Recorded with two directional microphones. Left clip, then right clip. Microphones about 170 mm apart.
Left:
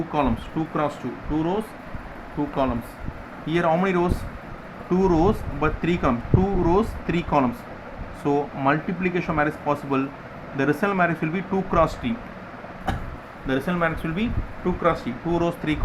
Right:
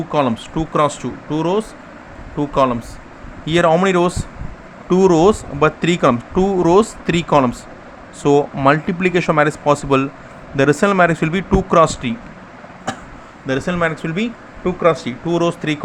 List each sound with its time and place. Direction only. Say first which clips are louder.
0.1 s speech: right 8 dB; 55° right (ahead or behind)
3.4 s speech: right 8 dB; 50° right (ahead or behind)
13.5 s speech: right 5 dB; 45° right (ahead or behind)